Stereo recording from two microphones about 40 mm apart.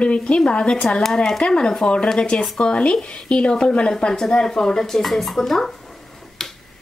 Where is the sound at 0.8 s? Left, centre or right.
Centre.